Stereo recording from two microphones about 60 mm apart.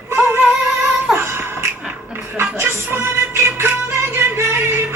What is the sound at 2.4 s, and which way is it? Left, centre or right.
Music, right.